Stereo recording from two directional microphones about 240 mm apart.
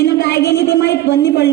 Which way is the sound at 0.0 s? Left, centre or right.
Left.